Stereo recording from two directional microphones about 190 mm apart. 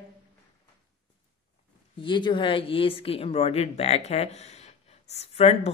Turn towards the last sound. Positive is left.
turn(degrees=35)  # may be behind; listen again after turning